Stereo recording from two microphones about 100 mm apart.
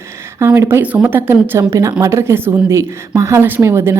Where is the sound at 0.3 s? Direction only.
25° right (ahead or behind).